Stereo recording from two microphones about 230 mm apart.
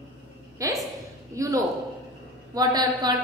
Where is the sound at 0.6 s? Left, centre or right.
Centre.